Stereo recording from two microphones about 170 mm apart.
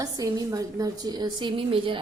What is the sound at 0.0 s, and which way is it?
A woman's voice, 20° right (ahead or behind).